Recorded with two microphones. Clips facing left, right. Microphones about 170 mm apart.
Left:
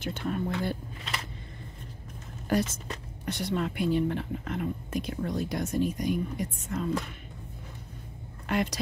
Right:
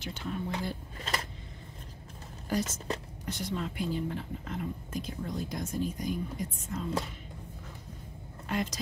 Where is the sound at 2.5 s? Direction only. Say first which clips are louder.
Left 4 dB; 65° left (ahead or behind).